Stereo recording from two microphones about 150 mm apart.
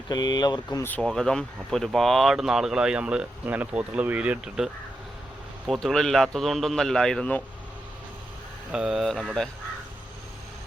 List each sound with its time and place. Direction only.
0.1 s speech: 25° left (ahead or behind)
0.9 s speech: 5° left (ahead or behind)
8.7 s speech: 5° right (ahead or behind)